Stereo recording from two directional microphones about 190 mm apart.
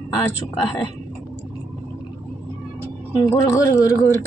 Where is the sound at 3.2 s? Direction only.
15° left (ahead or behind).